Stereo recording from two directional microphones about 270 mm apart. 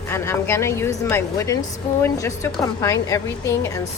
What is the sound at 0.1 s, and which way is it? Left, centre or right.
A woman's voice, centre.